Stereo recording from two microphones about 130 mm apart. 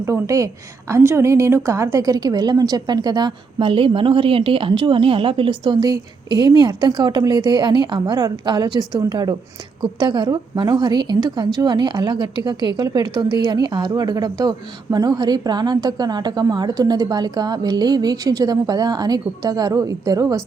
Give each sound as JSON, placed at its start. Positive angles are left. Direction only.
{"t": 0.0, "sound": "a woman's voice", "side_deg": -25}